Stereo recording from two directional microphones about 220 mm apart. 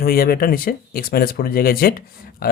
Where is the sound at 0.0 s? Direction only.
45° left (ahead or behind).